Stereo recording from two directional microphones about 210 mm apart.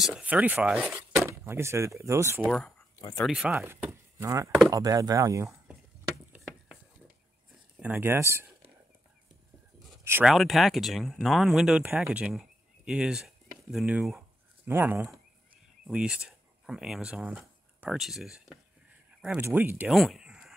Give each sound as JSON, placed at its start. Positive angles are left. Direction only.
{"t": 0.0, "sound": "speech", "side_deg": -5}
{"t": 2.4, "sound": "speech", "side_deg": 5}
{"t": 3.0, "sound": "speech", "side_deg": 20}
{"t": 3.3, "sound": "speech", "side_deg": -5}
{"t": 7.8, "sound": "speech", "side_deg": -10}
{"t": 10.0, "sound": "speech", "side_deg": -10}
{"t": 10.3, "sound": "speech", "side_deg": 0}